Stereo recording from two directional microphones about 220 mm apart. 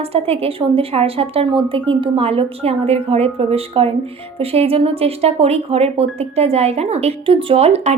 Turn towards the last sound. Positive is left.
turn(degrees=-30)  # may be behind; listen again after turning